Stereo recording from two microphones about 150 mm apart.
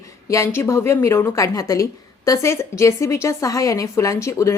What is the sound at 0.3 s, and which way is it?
Speech, 20° left (ahead or behind).